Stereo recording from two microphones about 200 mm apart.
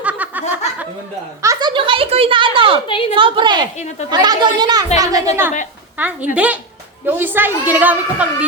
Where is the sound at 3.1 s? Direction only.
25° right (ahead or behind).